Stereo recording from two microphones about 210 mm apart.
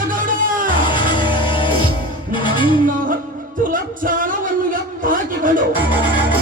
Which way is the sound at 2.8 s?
40° right (ahead or behind).